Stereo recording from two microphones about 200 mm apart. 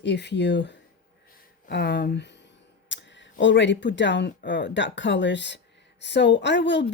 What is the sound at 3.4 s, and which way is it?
Speech, 65° left (ahead or behind).